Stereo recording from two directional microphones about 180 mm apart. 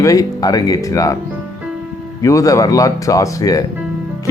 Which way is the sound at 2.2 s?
20° left (ahead or behind).